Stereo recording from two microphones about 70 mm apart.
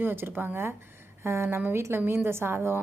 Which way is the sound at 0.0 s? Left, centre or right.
Right.